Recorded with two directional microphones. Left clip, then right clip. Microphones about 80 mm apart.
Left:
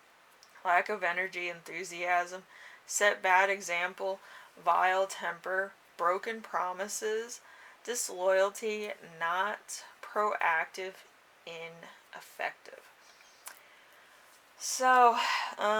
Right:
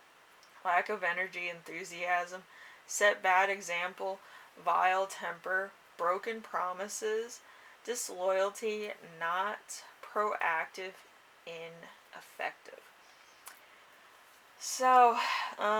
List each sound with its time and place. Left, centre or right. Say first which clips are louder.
0.6 s speech: left 2 dB; left
14.8 s speech: left 1 dB; left